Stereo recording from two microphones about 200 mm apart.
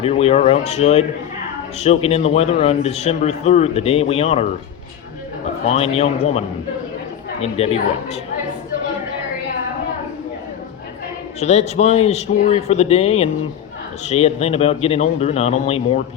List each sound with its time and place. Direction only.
0.0 s a man's voice: 30° left (ahead or behind)
5.6 s a man's voice: 30° left (ahead or behind)
7.4 s a woman's voice: 30° left (ahead or behind)
11.3 s a man's voice: 35° left (ahead or behind)